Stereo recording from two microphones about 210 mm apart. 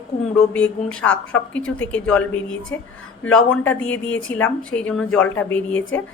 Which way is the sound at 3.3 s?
5° left (ahead or behind).